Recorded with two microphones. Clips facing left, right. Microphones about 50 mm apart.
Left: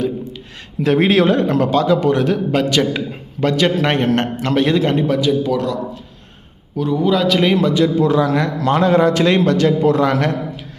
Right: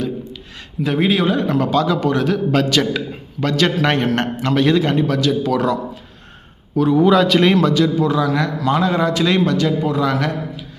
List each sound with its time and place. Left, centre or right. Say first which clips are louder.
0.9 s a man's voice: left 4 dB; left
6.7 s a man's voice: right 3 dB; centre
7.5 s a man's voice: left 1 dB; centre; by 10.7 s left